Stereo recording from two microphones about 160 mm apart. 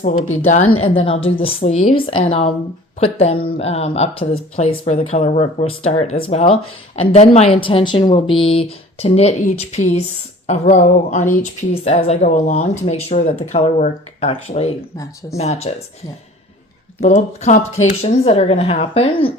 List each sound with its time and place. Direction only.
0.0 s speech: 45° left (ahead or behind)
17.0 s speech: 45° left (ahead or behind)